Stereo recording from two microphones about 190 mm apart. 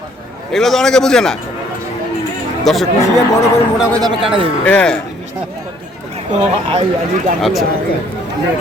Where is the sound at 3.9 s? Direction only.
25° right (ahead or behind).